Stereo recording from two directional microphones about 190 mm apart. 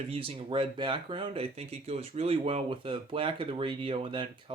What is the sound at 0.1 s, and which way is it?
Speech, 30° right (ahead or behind).